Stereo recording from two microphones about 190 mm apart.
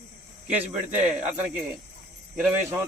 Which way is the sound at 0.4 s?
10° right (ahead or behind).